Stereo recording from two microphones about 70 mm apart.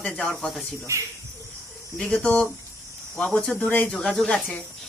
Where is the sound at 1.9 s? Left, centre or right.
Centre.